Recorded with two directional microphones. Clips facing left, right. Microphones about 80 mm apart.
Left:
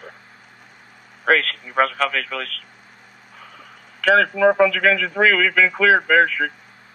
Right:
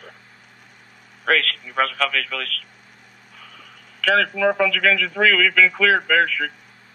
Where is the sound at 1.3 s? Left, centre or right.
Left.